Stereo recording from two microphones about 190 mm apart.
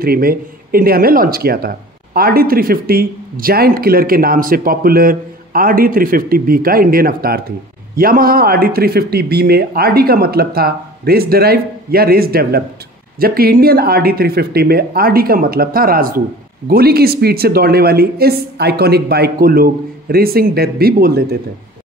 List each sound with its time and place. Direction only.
0.0 s a woman's voice: 50° right (ahead or behind)